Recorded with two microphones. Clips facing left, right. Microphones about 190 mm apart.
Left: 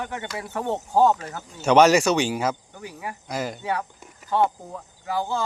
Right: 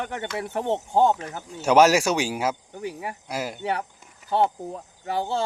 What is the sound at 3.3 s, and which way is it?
Speech, 5° right (ahead or behind).